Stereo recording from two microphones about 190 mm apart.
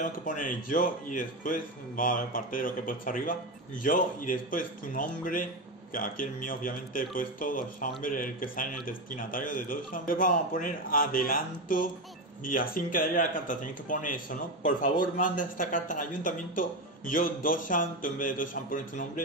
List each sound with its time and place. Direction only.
0.0 s speech: 45° left (ahead or behind)